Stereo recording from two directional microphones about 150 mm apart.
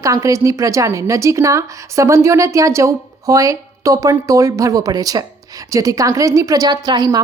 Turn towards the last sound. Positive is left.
turn(degrees=-30)  # may be behind; listen again after turning